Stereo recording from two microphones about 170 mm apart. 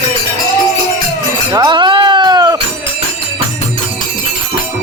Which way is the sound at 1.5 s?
25° right (ahead or behind).